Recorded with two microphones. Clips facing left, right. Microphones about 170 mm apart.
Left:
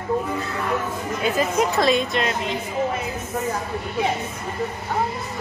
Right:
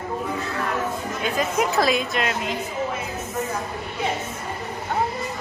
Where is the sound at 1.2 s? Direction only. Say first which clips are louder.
Left 2 dB; centre (ahead or behind).